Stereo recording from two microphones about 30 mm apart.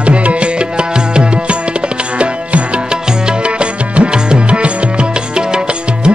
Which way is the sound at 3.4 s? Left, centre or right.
Right.